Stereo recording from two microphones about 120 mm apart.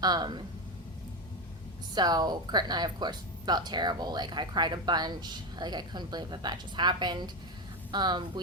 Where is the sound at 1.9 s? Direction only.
35° right (ahead or behind).